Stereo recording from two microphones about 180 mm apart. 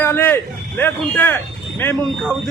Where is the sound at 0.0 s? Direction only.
10° left (ahead or behind).